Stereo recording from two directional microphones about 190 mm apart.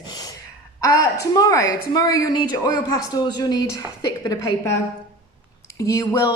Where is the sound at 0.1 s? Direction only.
20° left (ahead or behind).